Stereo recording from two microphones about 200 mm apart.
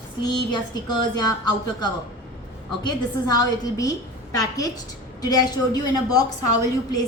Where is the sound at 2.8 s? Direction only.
20° left (ahead or behind).